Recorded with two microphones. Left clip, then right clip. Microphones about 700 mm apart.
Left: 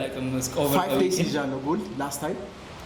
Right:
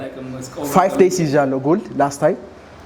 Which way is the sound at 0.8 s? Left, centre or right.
Right.